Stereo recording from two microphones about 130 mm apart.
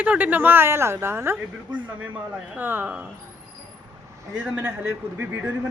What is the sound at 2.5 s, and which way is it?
Speech, 15° right (ahead or behind).